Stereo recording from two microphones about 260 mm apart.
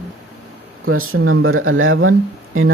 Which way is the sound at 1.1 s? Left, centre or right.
Right.